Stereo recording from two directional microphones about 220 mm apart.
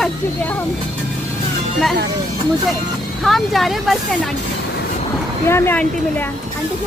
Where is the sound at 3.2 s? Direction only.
Centre (ahead or behind).